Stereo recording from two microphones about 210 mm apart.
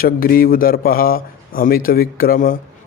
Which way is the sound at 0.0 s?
45° left (ahead or behind).